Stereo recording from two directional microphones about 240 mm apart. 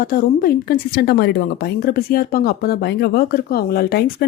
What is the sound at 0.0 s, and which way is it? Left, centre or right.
Speech, left.